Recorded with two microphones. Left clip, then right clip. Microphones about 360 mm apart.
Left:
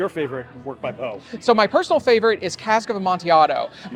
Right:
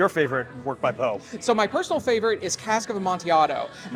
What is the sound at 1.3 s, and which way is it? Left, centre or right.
Speech, left.